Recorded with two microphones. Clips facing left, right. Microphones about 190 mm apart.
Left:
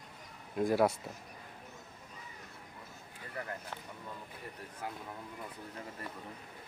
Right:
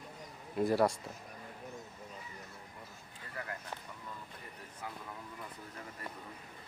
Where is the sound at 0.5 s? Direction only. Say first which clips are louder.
Left 1 dB; centre (ahead or behind).